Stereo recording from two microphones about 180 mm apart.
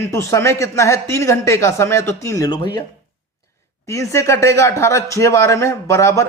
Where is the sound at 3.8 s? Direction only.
15° left (ahead or behind).